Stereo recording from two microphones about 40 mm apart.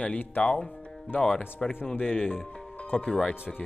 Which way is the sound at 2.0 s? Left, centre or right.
Left.